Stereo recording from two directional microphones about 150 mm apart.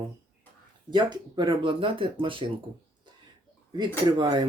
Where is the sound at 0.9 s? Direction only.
30° right (ahead or behind).